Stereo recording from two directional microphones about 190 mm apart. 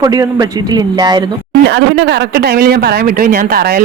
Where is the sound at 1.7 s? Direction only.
70° right (ahead or behind); by 3.8 s 50° right (ahead or behind).